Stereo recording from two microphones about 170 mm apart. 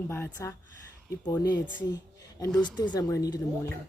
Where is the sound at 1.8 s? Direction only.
20° left (ahead or behind).